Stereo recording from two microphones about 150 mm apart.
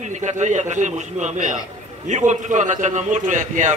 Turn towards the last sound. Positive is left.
turn(degrees=-55)  # may be behind; listen again after turning